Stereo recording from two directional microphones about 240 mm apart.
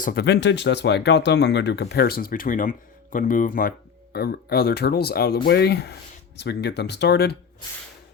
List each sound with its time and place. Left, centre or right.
0.0 s speech: left